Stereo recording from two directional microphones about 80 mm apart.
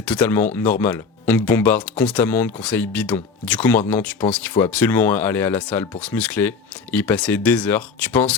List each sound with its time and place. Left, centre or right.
0.0 s speech: centre